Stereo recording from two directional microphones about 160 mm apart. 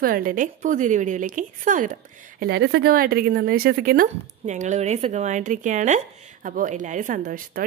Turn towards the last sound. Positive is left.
turn(degrees=-60)  # may be behind; listen again after turning